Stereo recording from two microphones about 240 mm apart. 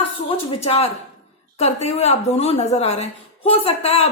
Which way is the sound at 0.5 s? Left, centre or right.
Left.